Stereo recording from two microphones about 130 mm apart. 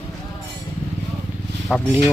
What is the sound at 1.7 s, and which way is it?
Speech, centre (ahead or behind).